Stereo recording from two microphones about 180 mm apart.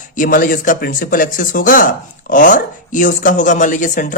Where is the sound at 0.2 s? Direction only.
50° left (ahead or behind).